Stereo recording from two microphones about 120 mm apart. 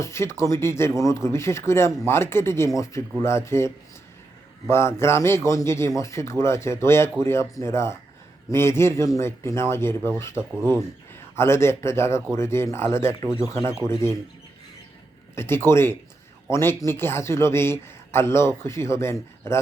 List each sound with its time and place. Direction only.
0.0 s a man's voice: 20° left (ahead or behind)
4.7 s a man's voice: 20° left (ahead or behind)
10.3 s speech: 10° right (ahead or behind)
11.1 s a man's voice: 20° left (ahead or behind)
15.4 s a man's voice: 20° left (ahead or behind)